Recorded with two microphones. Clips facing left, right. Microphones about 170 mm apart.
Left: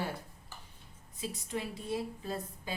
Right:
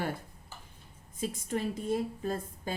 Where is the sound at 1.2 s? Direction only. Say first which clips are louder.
Right 5 dB; 50° right (ahead or behind).